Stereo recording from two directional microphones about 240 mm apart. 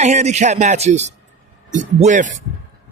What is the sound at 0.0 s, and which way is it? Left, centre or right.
A man's voice, right.